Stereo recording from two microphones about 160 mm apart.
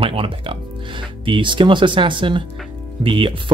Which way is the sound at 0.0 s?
35° right (ahead or behind).